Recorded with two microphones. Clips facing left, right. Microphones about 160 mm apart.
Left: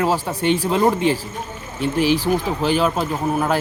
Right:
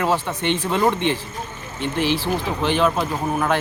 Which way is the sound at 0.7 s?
25° left (ahead or behind).